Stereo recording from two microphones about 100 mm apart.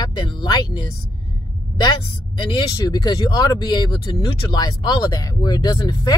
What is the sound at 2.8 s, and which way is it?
Speech, 40° left (ahead or behind).